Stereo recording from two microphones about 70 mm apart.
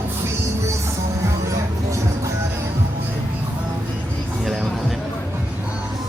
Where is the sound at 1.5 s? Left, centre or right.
Right.